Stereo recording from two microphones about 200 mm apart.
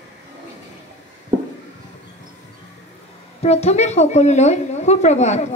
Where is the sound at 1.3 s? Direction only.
25° right (ahead or behind).